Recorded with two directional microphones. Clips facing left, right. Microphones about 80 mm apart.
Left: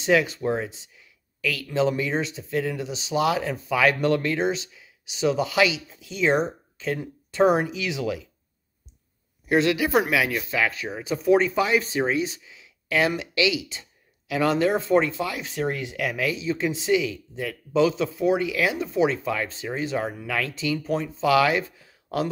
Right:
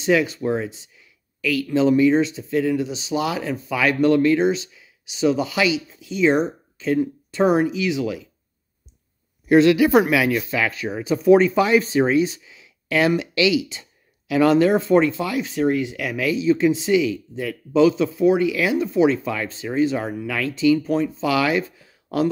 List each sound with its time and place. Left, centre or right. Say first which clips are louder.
0.0 s speech: right 2 dB; left
0.4 s speech: right 3 dB; left
1.4 s speech: right 5 dB; left
2.9 s speech: even; left
5.0 s speech: right 3 dB; left
7.5 s speech: right 5 dB; left
9.5 s speech: right 7 dB; centre
10.0 s speech: right 4 dB; centre; by 15.4 s left
15.7 s speech: right 5 dB; left
16.3 s speech: right 8 dB; left